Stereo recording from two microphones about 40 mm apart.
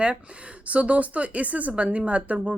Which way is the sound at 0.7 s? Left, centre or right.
Right.